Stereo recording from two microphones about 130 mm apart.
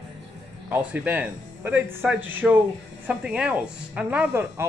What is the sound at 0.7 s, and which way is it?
Speech, 15° right (ahead or behind).